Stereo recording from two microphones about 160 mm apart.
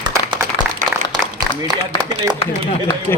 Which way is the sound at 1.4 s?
25° right (ahead or behind).